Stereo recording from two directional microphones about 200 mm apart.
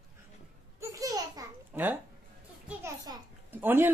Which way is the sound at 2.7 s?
15° right (ahead or behind).